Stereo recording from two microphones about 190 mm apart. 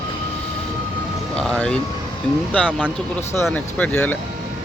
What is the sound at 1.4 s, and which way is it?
Speech, 5° left (ahead or behind).